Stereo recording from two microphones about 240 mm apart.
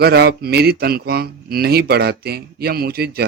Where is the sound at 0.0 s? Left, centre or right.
Right.